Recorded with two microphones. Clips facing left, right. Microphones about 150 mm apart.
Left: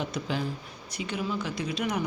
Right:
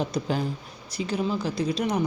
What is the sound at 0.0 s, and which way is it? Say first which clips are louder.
Speech: right 4 dB; 40° right (ahead or behind).